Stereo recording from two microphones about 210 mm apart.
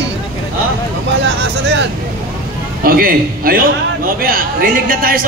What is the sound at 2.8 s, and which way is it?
A man's voice, 45° right (ahead or behind).